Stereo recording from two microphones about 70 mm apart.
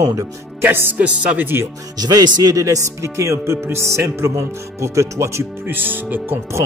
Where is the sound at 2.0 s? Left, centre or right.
Right.